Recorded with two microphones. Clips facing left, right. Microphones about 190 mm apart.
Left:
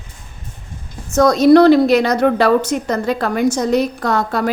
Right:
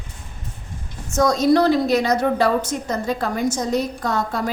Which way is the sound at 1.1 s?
70° left (ahead or behind).